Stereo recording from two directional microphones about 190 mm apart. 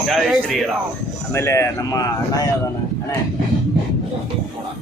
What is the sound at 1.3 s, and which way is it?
Speech, 15° left (ahead or behind).